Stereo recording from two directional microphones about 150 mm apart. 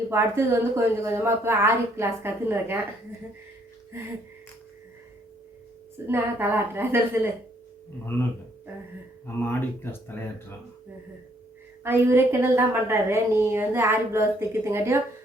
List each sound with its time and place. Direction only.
0.1 s a woman's voice: 15° right (ahead or behind)
6.1 s a woman's voice: 15° right (ahead or behind)
9.2 s speech: 15° left (ahead or behind)
11.8 s a woman's voice: 15° right (ahead or behind)